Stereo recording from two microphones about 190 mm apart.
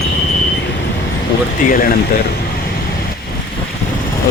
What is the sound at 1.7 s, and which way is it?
Speech, 50° left (ahead or behind).